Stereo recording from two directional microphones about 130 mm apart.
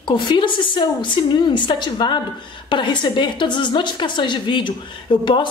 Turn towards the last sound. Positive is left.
turn(degrees=40)  # may be behind; listen again after turning